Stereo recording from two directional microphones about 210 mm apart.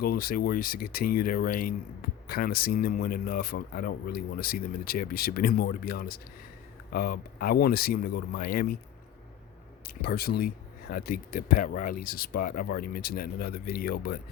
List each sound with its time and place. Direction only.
0.0 s speech: 45° left (ahead or behind)
9.8 s speech: 45° left (ahead or behind)